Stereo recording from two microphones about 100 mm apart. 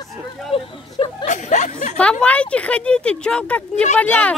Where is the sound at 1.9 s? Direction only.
10° left (ahead or behind).